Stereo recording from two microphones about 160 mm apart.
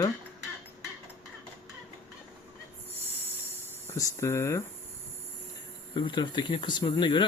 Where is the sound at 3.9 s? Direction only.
20° left (ahead or behind).